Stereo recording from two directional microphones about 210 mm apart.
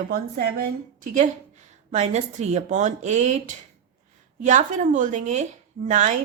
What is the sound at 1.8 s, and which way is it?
A woman's voice, 35° right (ahead or behind).